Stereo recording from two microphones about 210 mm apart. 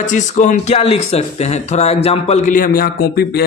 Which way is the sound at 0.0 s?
35° left (ahead or behind).